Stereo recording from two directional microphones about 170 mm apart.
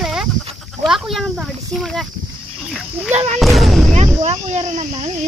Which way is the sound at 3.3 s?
Centre (ahead or behind).